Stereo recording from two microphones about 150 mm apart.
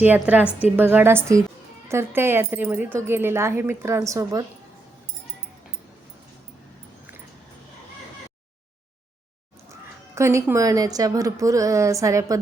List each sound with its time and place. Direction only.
0.0 s speech: 10° right (ahead or behind)
10.2 s a woman's voice: 20° right (ahead or behind)